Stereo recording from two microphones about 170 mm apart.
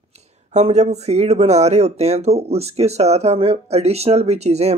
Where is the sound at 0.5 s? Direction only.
40° right (ahead or behind).